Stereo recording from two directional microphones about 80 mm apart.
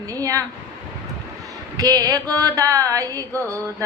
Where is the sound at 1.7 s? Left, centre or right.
Right.